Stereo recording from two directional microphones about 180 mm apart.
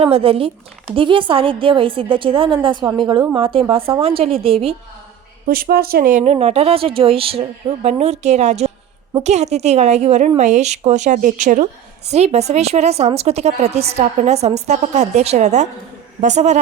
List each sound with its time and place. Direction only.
0.0 s a woman's voice: 30° right (ahead or behind)
5.5 s a woman's voice: 55° right (ahead or behind)